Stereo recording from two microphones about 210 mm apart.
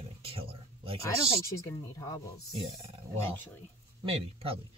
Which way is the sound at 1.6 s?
15° left (ahead or behind).